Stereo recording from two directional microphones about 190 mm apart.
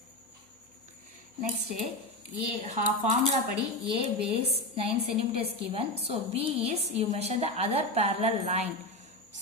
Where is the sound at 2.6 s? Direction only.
35° right (ahead or behind).